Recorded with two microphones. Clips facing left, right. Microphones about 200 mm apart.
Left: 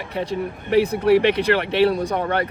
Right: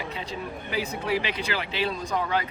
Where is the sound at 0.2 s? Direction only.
65° left (ahead or behind).